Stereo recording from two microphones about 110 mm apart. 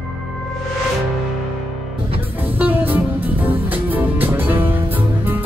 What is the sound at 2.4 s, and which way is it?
Music, 15° right (ahead or behind).